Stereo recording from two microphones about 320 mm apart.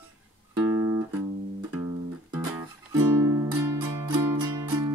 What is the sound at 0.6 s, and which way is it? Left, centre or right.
Guitar, centre.